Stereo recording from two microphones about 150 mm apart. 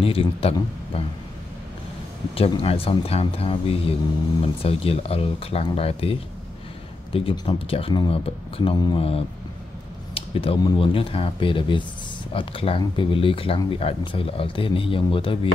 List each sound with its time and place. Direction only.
0.0 s speech: 40° left (ahead or behind)
2.3 s speech: 40° left (ahead or behind)